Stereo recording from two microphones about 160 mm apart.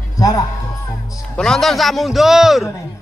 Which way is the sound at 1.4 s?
5° left (ahead or behind).